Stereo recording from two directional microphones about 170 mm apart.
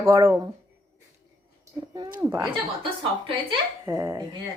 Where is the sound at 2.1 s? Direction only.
15° right (ahead or behind).